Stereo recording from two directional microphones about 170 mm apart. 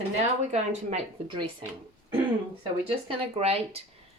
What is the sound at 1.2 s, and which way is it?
Speech, 30° right (ahead or behind).